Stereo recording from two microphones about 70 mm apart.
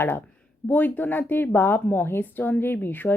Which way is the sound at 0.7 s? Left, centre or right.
Left.